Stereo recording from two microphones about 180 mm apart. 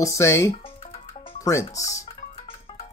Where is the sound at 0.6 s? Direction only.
30° left (ahead or behind).